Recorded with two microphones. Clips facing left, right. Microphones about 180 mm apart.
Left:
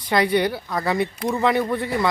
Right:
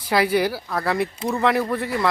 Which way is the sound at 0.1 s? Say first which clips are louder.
Even; 5° right (ahead or behind).